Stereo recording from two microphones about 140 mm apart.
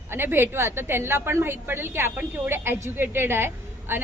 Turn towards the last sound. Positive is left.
turn(degrees=-15)  # may be behind; listen again after turning